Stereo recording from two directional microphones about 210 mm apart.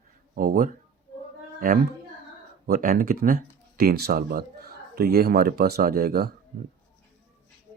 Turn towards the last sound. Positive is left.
turn(degrees=-45)  # may be behind; listen again after turning